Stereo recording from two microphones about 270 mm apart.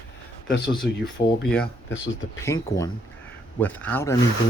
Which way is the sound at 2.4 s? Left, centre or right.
Centre.